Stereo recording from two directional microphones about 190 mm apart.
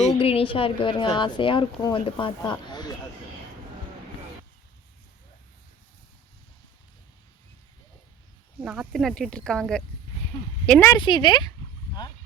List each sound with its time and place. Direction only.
0.1 s a woman's voice: 30° left (ahead or behind)
8.6 s speech: 5° right (ahead or behind)
10.3 s a woman's voice: 30° left (ahead or behind)
10.7 s speech: 10° left (ahead or behind)
11.0 s a woman's voice: 25° left (ahead or behind)